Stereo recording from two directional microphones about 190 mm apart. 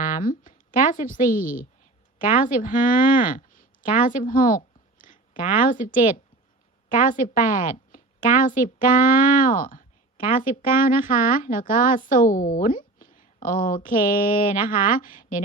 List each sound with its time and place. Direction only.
0.0 s a woman's voice: 45° left (ahead or behind)